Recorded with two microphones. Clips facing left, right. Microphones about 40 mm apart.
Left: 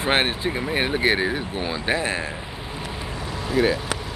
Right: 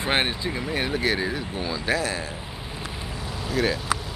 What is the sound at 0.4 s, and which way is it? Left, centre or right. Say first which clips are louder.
Speech: left 3 dB; left.